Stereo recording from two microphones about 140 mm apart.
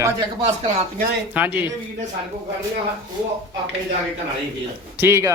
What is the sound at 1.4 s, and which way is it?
Speech, 15° right (ahead or behind).